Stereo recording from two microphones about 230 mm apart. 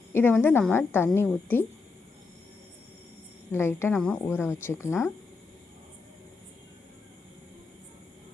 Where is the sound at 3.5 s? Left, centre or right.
Centre.